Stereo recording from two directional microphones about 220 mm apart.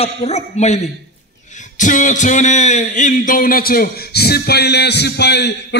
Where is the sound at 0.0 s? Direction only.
30° left (ahead or behind).